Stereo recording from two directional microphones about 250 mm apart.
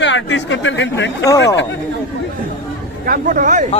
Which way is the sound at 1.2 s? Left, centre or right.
Centre.